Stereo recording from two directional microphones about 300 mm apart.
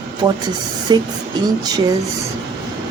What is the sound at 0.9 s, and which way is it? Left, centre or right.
Speech, centre.